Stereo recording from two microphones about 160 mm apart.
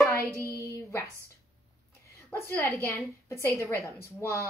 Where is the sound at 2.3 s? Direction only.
10° left (ahead or behind).